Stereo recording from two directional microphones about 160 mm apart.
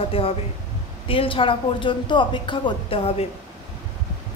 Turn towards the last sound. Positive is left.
turn(degrees=35)  # may be behind; listen again after turning